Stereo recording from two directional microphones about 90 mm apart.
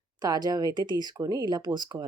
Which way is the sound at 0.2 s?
45° right (ahead or behind).